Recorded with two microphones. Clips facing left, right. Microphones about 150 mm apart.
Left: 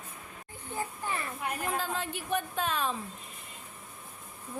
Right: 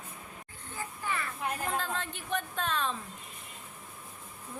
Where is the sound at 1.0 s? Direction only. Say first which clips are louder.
Right 3 dB; 30° left (ahead or behind).